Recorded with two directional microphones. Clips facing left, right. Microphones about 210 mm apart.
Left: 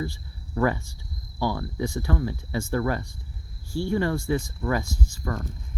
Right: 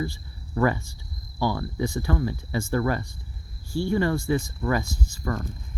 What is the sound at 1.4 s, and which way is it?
Speech, 5° right (ahead or behind).